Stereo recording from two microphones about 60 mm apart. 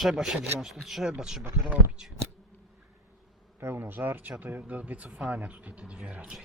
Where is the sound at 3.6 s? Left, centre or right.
Right; by 6.3 s centre.